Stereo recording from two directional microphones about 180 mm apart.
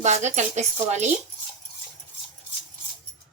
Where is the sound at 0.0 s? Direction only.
40° right (ahead or behind).